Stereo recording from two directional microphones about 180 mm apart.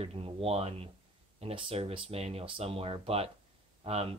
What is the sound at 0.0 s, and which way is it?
Speech, 35° right (ahead or behind).